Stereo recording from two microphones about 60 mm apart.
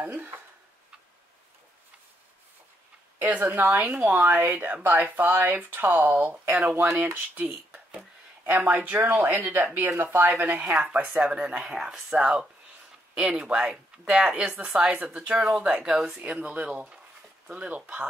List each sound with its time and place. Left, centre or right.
0.0 s speech: right
3.2 s speech: right
8.5 s speech: right